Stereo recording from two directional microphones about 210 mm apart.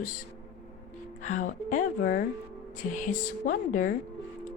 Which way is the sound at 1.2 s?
35° left (ahead or behind).